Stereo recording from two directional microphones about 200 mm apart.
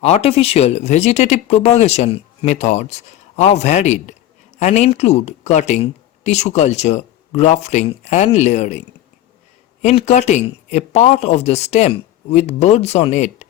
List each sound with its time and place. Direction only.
0.0 s speech: 30° left (ahead or behind)
9.8 s speech: 35° left (ahead or behind)